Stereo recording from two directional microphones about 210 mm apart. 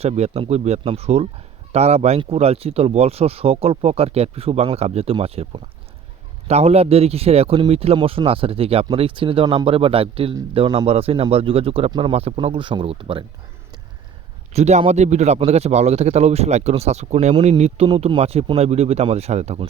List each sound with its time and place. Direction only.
0.0 s speech: 30° right (ahead or behind)
14.5 s speech: 30° right (ahead or behind)